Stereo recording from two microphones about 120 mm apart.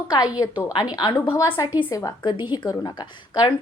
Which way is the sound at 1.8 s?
30° left (ahead or behind).